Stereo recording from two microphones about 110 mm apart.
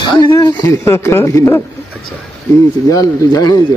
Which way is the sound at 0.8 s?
25° left (ahead or behind).